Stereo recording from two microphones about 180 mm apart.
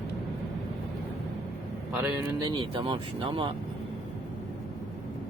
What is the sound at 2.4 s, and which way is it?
Speech, 25° right (ahead or behind).